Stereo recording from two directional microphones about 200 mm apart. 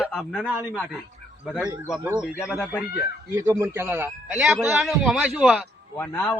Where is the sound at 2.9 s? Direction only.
15° right (ahead or behind).